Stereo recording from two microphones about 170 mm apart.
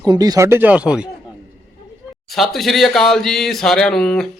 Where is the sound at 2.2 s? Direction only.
Centre (ahead or behind).